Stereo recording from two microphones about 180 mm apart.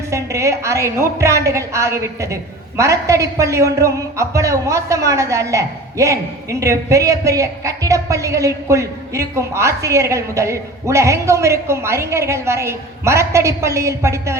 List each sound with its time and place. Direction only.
0.1 s a woman's voice: 15° right (ahead or behind)